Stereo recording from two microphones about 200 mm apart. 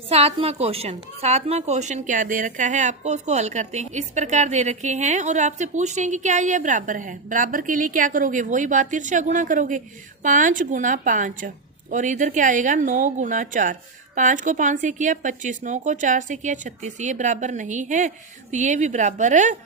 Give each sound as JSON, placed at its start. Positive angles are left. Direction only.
{"t": 0.1, "sound": "a woman's voice", "side_deg": -30}